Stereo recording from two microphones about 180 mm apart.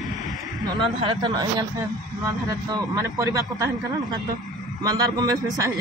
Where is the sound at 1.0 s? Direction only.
25° right (ahead or behind).